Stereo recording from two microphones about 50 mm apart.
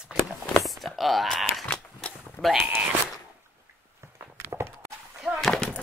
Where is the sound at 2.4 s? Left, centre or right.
Left.